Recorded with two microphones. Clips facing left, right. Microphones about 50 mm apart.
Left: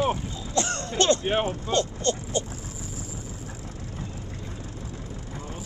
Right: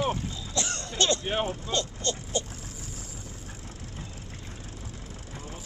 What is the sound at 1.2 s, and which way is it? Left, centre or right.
Speech, centre.